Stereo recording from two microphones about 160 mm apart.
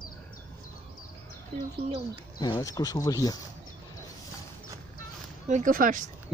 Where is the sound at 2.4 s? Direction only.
25° left (ahead or behind).